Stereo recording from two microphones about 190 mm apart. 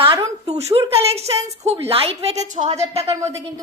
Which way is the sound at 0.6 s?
30° right (ahead or behind).